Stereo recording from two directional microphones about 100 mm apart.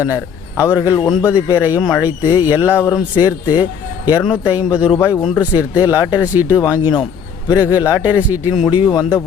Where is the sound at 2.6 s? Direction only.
25° left (ahead or behind).